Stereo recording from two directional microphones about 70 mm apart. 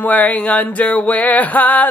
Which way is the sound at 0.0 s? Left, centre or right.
Left.